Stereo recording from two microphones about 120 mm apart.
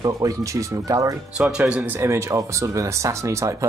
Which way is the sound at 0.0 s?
25° right (ahead or behind).